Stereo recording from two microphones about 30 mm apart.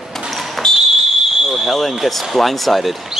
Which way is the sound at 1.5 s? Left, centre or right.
Centre.